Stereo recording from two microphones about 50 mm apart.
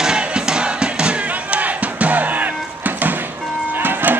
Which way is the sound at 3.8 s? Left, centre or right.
Right.